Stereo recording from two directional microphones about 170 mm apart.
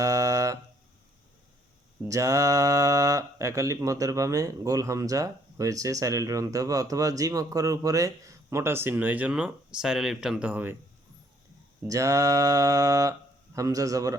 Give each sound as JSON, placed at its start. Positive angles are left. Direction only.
{"t": 0.0, "sound": "a sound", "side_deg": -20}
{"t": 2.0, "sound": "speech", "side_deg": -20}
{"t": 11.9, "sound": "speech", "side_deg": -20}